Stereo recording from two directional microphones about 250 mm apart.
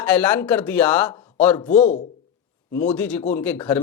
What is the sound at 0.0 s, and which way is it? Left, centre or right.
Speech, centre.